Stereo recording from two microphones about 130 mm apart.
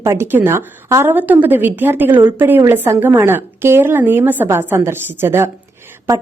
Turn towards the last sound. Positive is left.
turn(degrees=-25)  # may be behind; listen again after turning